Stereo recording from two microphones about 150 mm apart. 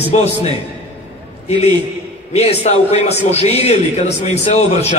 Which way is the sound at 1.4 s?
45° left (ahead or behind).